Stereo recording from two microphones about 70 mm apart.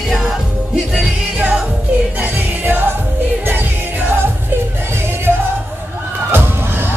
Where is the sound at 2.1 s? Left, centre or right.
Right.